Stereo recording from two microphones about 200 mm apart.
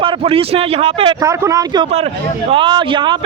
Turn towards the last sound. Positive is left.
turn(degrees=-25)  # may be behind; listen again after turning